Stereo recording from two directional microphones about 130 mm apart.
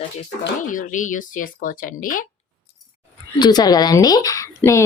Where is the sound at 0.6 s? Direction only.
90° left.